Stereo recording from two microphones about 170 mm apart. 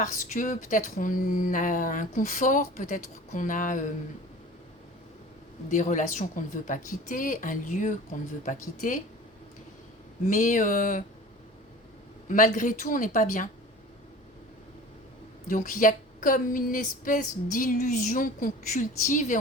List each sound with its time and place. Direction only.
0.0 s a woman's voice: 50° left (ahead or behind)
5.7 s a woman's voice: 50° left (ahead or behind)
10.2 s a woman's voice: 50° left (ahead or behind)
12.3 s a woman's voice: 50° left (ahead or behind)
15.4 s a woman's voice: 50° left (ahead or behind)